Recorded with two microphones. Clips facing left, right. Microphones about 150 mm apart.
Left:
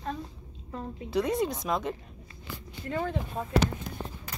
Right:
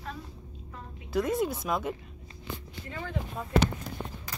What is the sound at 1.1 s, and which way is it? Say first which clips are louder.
Speech: even; centre (ahead or behind).